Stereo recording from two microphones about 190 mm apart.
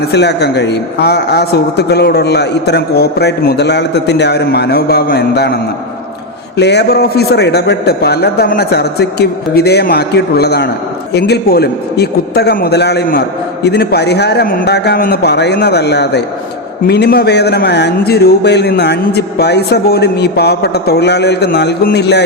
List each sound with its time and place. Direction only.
0.0 s a man's voice: 60° left (ahead or behind)
6.6 s a man's voice: 65° left (ahead or behind)